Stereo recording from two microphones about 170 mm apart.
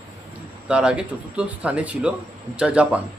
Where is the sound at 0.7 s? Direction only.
5° right (ahead or behind).